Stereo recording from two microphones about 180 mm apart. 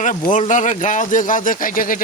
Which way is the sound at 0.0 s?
45° left (ahead or behind).